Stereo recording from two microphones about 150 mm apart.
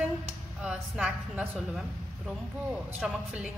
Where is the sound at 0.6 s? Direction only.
5° right (ahead or behind).